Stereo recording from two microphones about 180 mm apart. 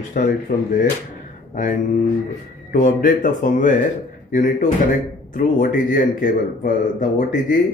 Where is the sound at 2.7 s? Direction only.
45° left (ahead or behind).